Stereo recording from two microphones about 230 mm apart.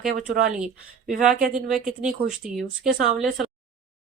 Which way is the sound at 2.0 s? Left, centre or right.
Centre.